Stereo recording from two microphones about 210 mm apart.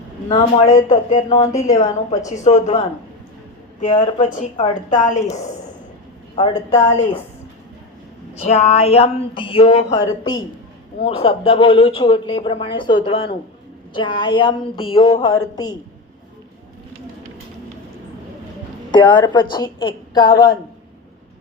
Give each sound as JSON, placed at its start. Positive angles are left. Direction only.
{"t": 0.3, "sound": "a woman's voice", "side_deg": 15}
{"t": 2.3, "sound": "a woman's voice", "side_deg": 35}
{"t": 6.3, "sound": "speech", "side_deg": 20}
{"t": 8.4, "sound": "speech", "side_deg": 30}
{"t": 18.9, "sound": "speech", "side_deg": 20}